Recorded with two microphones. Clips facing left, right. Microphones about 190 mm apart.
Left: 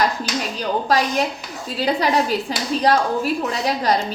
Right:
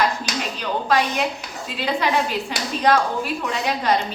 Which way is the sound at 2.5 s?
35° left (ahead or behind).